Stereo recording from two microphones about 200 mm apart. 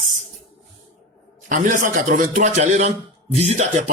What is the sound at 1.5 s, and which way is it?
A man's voice, 40° right (ahead or behind).